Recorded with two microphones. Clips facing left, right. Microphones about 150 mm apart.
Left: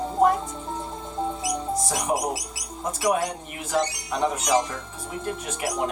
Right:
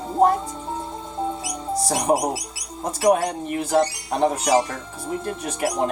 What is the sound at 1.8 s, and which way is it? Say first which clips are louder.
Speech: right 8 dB; 35° right (ahead or behind).